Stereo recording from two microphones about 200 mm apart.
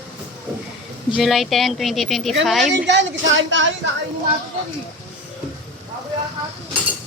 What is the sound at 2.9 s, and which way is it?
Speech, 65° right (ahead or behind).